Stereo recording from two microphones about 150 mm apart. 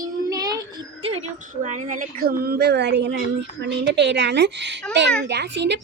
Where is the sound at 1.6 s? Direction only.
55° right (ahead or behind); by 2.7 s 90° right.